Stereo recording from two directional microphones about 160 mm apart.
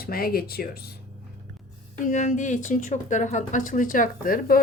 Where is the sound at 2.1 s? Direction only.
50° left (ahead or behind).